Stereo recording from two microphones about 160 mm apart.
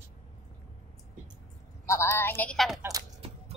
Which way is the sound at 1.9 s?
15° left (ahead or behind).